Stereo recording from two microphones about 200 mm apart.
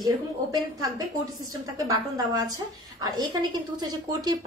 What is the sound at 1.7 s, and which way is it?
A woman's voice, 20° right (ahead or behind).